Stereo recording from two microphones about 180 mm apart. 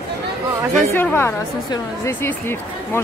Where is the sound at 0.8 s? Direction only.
10° left (ahead or behind).